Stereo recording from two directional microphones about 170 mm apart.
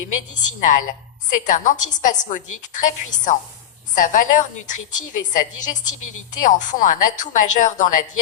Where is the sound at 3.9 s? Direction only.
50° left (ahead or behind).